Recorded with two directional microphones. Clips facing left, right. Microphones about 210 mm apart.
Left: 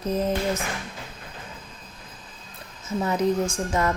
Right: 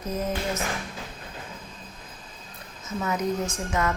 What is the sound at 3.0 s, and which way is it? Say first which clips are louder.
Speech: left 4 dB; 30° left (ahead or behind).